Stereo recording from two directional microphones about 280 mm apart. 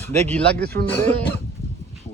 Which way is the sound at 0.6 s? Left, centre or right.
Right.